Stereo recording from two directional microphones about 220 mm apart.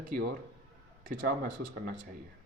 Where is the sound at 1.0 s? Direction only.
40° right (ahead or behind).